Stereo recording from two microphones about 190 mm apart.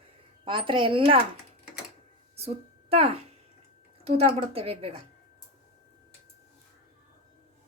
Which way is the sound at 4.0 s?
30° right (ahead or behind).